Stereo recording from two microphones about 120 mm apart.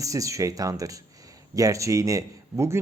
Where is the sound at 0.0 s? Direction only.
25° right (ahead or behind).